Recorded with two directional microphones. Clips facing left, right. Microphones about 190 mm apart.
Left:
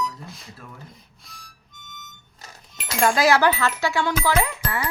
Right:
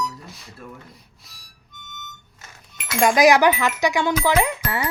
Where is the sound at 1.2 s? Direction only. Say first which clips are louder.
Left 5 dB; centre (ahead or behind).